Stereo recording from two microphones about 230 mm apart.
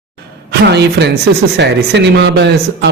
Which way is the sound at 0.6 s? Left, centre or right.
Right.